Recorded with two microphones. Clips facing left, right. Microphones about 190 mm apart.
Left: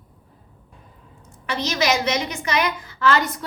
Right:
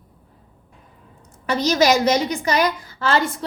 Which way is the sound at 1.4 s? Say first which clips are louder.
Right 5 dB; 40° right (ahead or behind).